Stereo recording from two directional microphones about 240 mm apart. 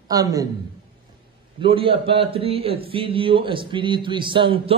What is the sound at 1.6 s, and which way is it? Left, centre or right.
A man's voice, right.